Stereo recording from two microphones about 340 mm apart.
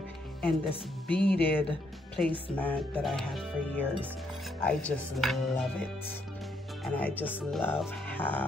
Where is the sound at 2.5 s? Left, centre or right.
Centre.